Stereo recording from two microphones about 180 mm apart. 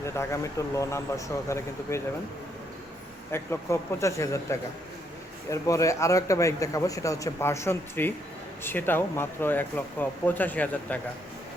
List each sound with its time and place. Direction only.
0.0 s a man's voice: 15° left (ahead or behind)
3.3 s a man's voice: 15° left (ahead or behind)